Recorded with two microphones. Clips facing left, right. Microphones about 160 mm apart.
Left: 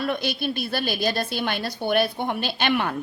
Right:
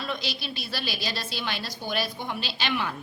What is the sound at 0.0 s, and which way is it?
A woman's voice, 55° left (ahead or behind).